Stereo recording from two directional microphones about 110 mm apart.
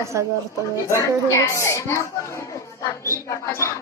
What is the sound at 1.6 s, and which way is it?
A child's voice, 25° left (ahead or behind).